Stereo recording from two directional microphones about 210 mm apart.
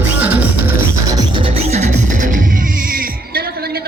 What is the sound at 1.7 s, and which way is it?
Music, 35° right (ahead or behind).